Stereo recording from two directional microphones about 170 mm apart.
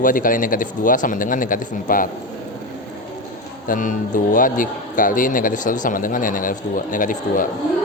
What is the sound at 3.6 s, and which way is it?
Speech, 50° left (ahead or behind).